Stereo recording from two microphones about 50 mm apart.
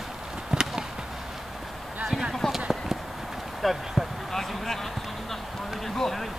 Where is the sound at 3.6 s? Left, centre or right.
Centre.